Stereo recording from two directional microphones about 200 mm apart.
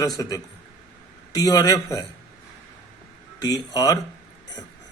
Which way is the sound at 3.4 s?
20° left (ahead or behind).